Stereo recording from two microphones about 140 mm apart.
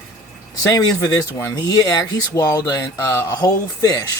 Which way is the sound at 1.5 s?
25° left (ahead or behind).